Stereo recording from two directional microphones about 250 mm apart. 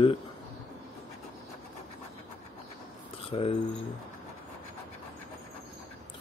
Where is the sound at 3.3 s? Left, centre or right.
Left.